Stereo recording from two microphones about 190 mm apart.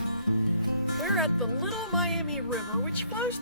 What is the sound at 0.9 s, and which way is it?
Speech, centre (ahead or behind).